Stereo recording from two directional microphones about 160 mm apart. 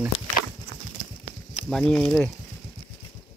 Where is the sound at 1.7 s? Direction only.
5° left (ahead or behind).